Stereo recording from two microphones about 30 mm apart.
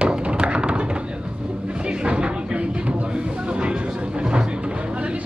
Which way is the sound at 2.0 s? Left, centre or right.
Right.